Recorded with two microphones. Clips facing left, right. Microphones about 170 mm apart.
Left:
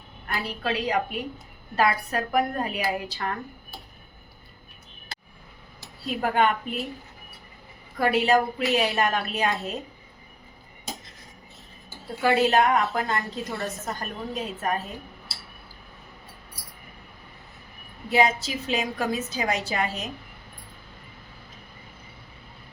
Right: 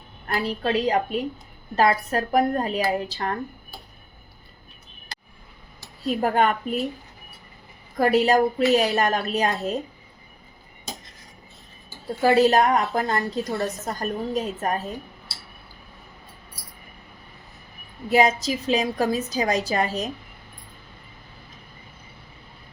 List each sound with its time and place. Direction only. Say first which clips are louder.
0.3 s a woman's voice: right 5 dB; 40° right (ahead or behind)
6.1 s a woman's voice: right 2 dB; 40° right (ahead or behind)
7.9 s a woman's voice: right 3 dB; 40° right (ahead or behind)
12.2 s a woman's voice: right 3 dB; 35° right (ahead or behind)
18.1 s a woman's voice: right 3 dB; 40° right (ahead or behind)